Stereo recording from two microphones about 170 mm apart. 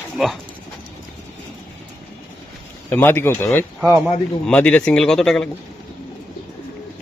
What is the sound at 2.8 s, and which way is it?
Speech, 10° left (ahead or behind).